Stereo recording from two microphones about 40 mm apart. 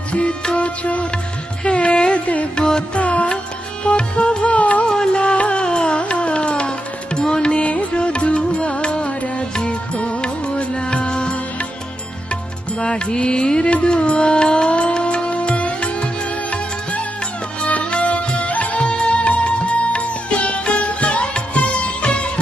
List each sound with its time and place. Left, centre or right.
0.1 s music: left
4.6 s music: left
12.8 s music: left
18.8 s music: left